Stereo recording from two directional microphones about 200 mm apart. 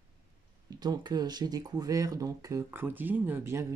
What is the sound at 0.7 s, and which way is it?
Speech, 20° right (ahead or behind).